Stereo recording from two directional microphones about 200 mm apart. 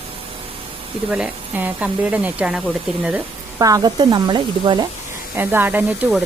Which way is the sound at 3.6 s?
15° right (ahead or behind).